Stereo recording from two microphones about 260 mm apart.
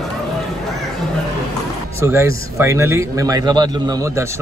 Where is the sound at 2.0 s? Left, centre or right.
Centre.